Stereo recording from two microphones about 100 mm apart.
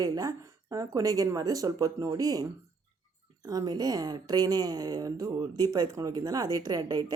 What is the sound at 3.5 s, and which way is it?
Speech, 40° right (ahead or behind).